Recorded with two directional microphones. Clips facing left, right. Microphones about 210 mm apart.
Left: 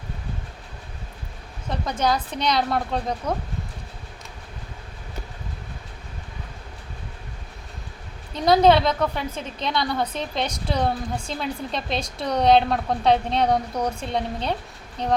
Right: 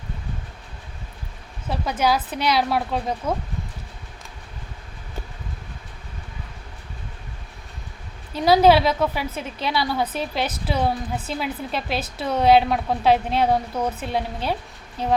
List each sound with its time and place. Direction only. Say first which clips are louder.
1.7 s speech: right 2 dB; 5° right (ahead or behind)
8.3 s a woman's voice: right 1 dB; 5° right (ahead or behind)